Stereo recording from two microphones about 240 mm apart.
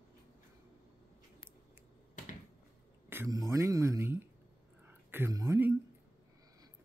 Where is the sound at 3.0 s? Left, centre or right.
Centre.